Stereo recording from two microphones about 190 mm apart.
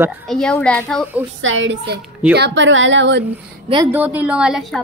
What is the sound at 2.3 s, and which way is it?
Speech, 65° right (ahead or behind).